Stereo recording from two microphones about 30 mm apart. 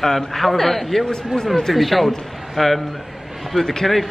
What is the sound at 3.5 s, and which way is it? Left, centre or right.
Speech, left.